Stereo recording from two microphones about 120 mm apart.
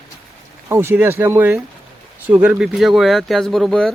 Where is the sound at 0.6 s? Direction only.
20° right (ahead or behind).